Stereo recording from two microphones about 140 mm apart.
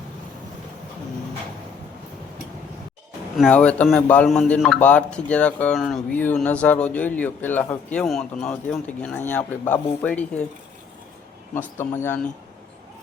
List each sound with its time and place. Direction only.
3.5 s speech: 10° left (ahead or behind)
11.5 s speech: 15° left (ahead or behind)